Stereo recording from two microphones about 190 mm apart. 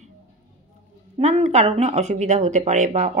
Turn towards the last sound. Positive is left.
turn(degrees=-40)  # may be behind; listen again after turning